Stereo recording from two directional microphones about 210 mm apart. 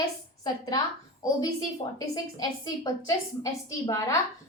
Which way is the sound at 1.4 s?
15° left (ahead or behind).